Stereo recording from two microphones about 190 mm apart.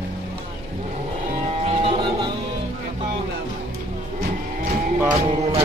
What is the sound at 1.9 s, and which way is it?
Music, 25° right (ahead or behind).